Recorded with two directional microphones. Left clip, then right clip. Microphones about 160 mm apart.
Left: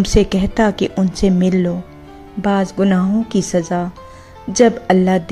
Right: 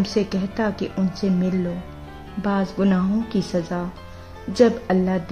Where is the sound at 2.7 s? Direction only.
25° left (ahead or behind).